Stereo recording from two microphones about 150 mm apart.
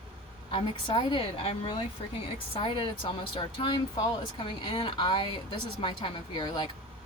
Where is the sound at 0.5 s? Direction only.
30° left (ahead or behind).